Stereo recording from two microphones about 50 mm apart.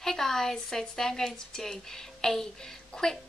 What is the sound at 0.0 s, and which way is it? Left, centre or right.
A woman's voice, centre.